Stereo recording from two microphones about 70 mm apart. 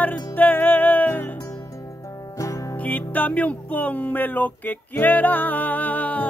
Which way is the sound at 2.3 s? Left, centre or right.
Left.